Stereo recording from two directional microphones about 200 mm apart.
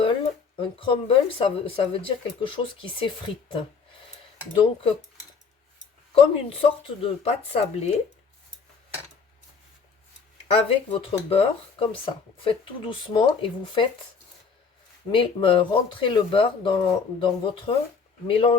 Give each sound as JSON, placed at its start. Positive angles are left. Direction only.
{"t": 0.0, "sound": "speech", "side_deg": 25}
{"t": 6.1, "sound": "speech", "side_deg": 30}
{"t": 10.5, "sound": "speech", "side_deg": 30}
{"t": 15.1, "sound": "speech", "side_deg": 25}